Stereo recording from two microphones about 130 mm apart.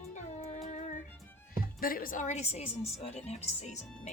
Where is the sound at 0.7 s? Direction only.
90° left.